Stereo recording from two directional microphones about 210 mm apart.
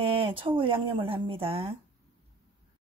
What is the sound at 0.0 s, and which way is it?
Speech, 25° right (ahead or behind).